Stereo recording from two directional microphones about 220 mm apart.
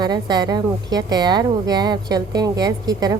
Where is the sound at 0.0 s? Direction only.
20° right (ahead or behind).